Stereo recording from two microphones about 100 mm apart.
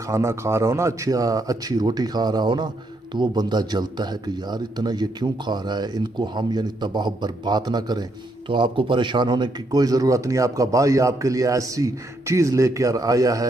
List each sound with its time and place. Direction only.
0.1 s a man's voice: 30° right (ahead or behind); by 8.0 s 45° right (ahead or behind)
8.5 s a man's voice: 55° right (ahead or behind); by 13.5 s 35° right (ahead or behind)